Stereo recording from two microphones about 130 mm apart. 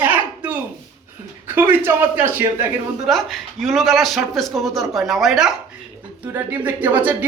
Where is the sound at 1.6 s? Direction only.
15° right (ahead or behind).